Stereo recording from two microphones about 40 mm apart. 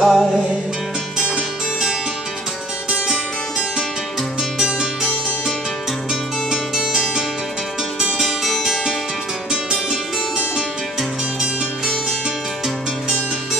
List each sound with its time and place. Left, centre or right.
0.0 s music: centre
2.9 s music: centre
4.6 s music: centre
6.5 s music: centre
10.3 s music: centre